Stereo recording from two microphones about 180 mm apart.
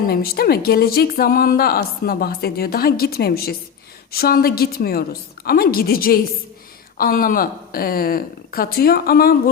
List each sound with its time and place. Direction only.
0.1 s a woman's voice: 60° left (ahead or behind)